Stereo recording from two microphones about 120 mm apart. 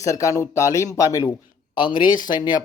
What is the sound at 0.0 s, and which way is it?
Chopping, 25° left (ahead or behind).